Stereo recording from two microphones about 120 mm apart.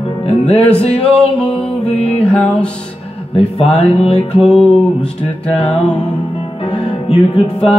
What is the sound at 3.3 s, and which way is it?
Music, 55° left (ahead or behind).